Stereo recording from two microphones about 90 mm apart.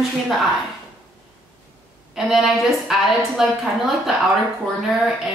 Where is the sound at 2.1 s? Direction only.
Centre (ahead or behind).